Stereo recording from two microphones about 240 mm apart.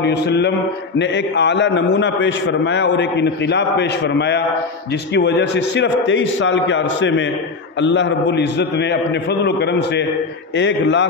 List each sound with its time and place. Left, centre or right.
0.0 s a man's voice: left